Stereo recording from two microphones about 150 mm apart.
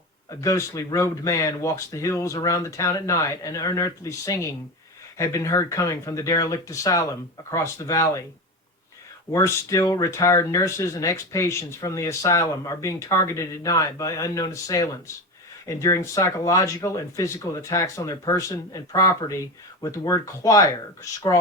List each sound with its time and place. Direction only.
0.3 s speech: 20° left (ahead or behind)
9.3 s speech: 20° left (ahead or behind)